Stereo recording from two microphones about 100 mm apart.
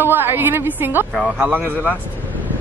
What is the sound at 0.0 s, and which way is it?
Speech, 20° right (ahead or behind).